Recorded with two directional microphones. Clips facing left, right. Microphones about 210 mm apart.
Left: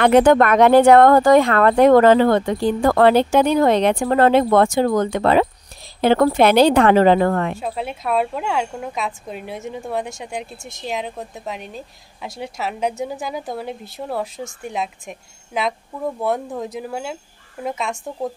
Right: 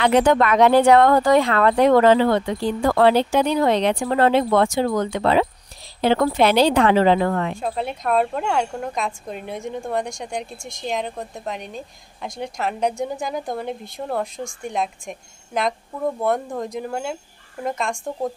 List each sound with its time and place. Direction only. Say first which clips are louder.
0.0 s speech: left 4 dB; 50° left (ahead or behind)
7.6 s speech: right 1 dB; 5° left (ahead or behind)